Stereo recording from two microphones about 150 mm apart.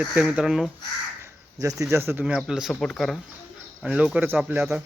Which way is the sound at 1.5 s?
20° right (ahead or behind).